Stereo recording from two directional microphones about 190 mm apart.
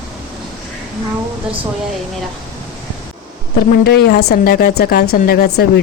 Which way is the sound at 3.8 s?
55° left (ahead or behind).